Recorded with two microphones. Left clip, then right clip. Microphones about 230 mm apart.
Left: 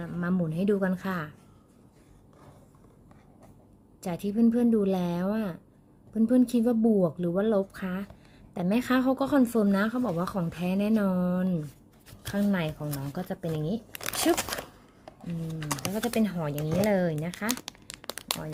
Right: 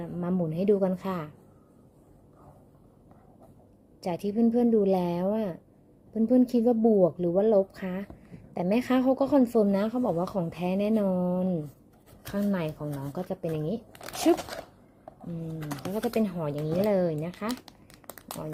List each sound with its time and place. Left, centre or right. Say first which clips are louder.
0.0 s a woman's voice: right 1 dB; left
4.0 s a woman's voice: even; left
13.9 s a sound: left 5 dB; left
15.9 s a woman's voice: right 2 dB; left
17.8 s crumpling: left 13 dB; left